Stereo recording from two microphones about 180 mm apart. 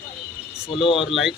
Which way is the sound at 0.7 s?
30° left (ahead or behind).